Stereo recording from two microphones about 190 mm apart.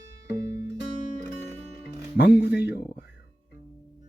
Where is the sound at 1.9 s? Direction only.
55° left (ahead or behind).